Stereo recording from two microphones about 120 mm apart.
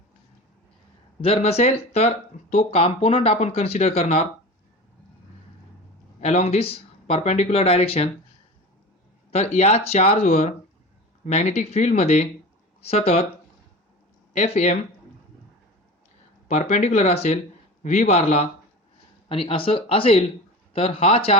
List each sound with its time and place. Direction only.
1.2 s speech: 55° left (ahead or behind)
6.1 s speech: 65° left (ahead or behind)
9.3 s speech: 65° left (ahead or behind)
14.3 s speech: 70° left (ahead or behind)
16.5 s speech: 70° left (ahead or behind)
19.3 s speech: 50° left (ahead or behind)